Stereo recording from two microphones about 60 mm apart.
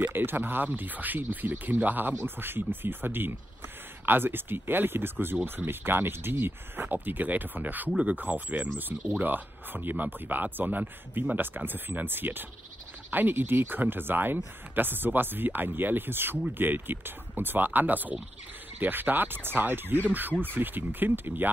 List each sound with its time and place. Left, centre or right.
0.0 s speech: right